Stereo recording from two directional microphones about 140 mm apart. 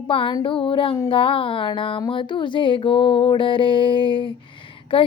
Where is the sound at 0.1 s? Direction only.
40° left (ahead or behind).